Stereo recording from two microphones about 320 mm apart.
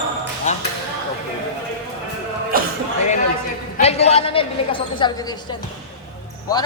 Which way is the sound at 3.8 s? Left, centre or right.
Centre.